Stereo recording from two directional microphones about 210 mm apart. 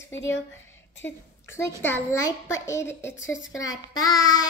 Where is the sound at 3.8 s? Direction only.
20° left (ahead or behind).